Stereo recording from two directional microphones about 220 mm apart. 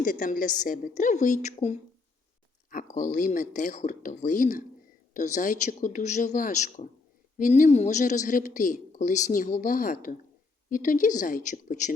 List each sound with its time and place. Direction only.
0.0 s a woman's voice: 35° left (ahead or behind)
2.9 s a woman's voice: 35° left (ahead or behind)